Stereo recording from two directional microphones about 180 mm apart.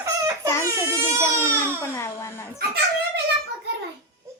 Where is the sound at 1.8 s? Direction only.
15° left (ahead or behind).